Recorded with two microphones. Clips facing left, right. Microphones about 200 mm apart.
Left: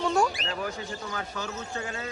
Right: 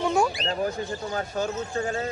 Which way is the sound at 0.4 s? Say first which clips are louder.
Right 6 dB; 35° right (ahead or behind).